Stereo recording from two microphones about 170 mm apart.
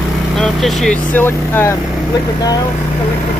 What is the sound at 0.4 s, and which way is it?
Speech, centre (ahead or behind).